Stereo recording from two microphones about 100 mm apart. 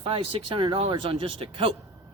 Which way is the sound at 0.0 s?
60° right (ahead or behind).